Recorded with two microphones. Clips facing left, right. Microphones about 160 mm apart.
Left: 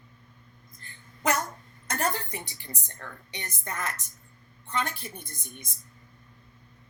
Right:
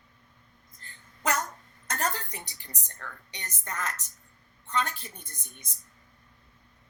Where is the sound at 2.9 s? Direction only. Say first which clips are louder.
Even; 20° left (ahead or behind).